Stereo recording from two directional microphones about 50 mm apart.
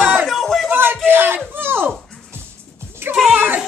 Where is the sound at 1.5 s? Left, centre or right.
Right.